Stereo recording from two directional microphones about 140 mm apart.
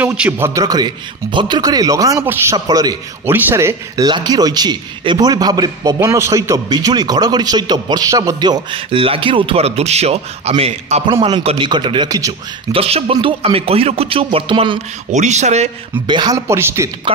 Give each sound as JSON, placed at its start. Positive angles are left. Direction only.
{"t": 0.0, "sound": "a man's voice", "side_deg": -15}
{"t": 0.6, "sound": "speech", "side_deg": -30}
{"t": 3.3, "sound": "a man's voice", "side_deg": -15}
{"t": 11.1, "sound": "a man's voice", "side_deg": -35}
{"t": 12.7, "sound": "speech", "side_deg": -45}
{"t": 15.0, "sound": "speech", "side_deg": -55}
{"t": 16.1, "sound": "speech", "side_deg": -30}